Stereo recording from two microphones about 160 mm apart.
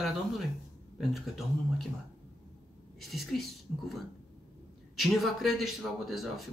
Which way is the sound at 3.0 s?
Centre (ahead or behind).